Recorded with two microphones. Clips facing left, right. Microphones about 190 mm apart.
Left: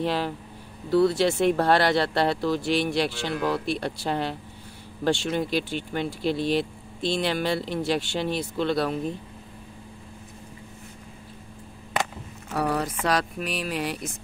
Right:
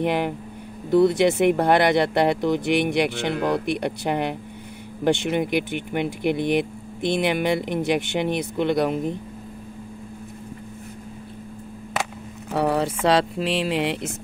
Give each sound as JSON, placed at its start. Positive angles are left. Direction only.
{"t": 0.0, "sound": "speech", "side_deg": -20}
{"t": 12.4, "sound": "speech", "side_deg": -25}